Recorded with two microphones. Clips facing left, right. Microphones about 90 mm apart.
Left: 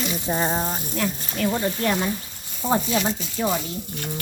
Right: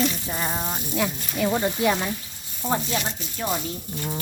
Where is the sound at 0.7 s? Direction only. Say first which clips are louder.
Even; 10° right (ahead or behind).